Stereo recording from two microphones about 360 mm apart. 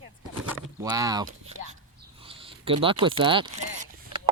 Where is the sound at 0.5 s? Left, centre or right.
Centre.